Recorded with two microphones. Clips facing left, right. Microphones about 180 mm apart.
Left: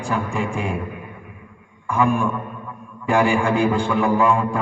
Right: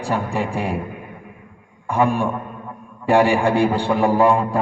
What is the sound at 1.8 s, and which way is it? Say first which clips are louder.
A man's voice: right 1 dB; 35° right (ahead or behind).